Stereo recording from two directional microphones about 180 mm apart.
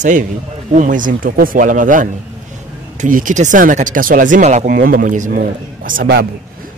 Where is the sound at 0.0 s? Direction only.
45° right (ahead or behind).